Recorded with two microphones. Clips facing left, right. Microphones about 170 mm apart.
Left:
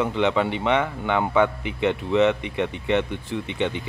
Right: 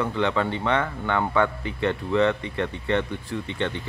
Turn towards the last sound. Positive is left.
turn(degrees=15)  # may be behind; listen again after turning